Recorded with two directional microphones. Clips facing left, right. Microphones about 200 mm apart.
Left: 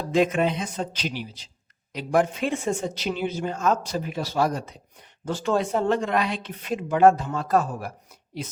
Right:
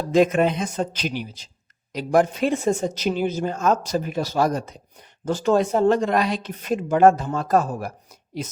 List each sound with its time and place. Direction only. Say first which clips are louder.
0.1 s a man's voice: right 4 dB; 45° right (ahead or behind)